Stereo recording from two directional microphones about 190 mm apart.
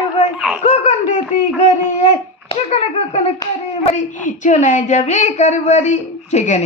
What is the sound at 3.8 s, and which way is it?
Speech, 40° left (ahead or behind).